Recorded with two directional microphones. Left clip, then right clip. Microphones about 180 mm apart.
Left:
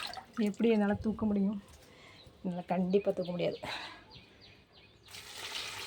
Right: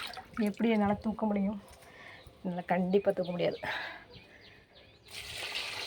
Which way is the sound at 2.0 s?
5° left (ahead or behind).